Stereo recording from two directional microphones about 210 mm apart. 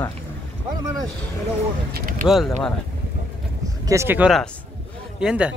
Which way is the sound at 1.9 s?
40° right (ahead or behind).